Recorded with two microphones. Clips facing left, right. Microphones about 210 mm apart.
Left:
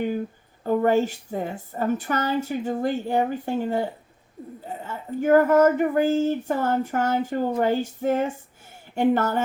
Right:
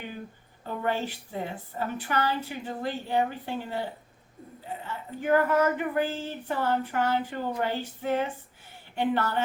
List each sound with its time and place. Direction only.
0.6 s speech: 45° left (ahead or behind)